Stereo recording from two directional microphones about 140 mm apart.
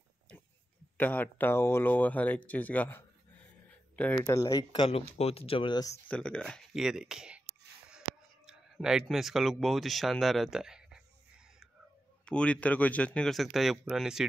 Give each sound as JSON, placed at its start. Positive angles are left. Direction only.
{"t": 0.9, "sound": "speech", "side_deg": 10}
{"t": 4.1, "sound": "speech", "side_deg": 20}
{"t": 5.1, "sound": "speech", "side_deg": 45}
{"t": 6.0, "sound": "speech", "side_deg": 10}
{"t": 8.5, "sound": "speech", "side_deg": -5}
{"t": 12.3, "sound": "speech", "side_deg": 10}